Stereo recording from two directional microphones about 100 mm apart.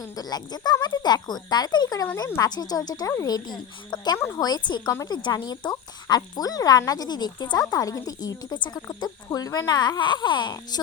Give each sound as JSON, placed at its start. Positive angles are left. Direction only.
{"t": 0.2, "sound": "speech", "side_deg": 45}